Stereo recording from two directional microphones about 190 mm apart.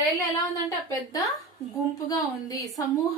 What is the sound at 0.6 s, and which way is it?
A woman's voice, 15° left (ahead or behind).